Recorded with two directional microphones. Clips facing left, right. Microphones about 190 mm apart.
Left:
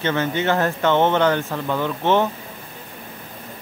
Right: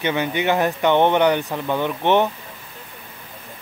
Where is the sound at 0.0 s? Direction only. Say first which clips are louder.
Even; 15° right (ahead or behind).